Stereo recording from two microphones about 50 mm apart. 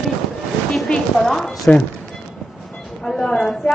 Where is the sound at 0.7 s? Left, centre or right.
Centre.